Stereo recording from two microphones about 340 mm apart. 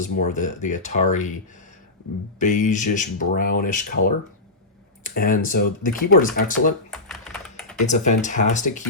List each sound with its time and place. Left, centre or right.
0.0 s speech: left
2.4 s speech: left
6.9 s typing: centre
7.9 s speech: left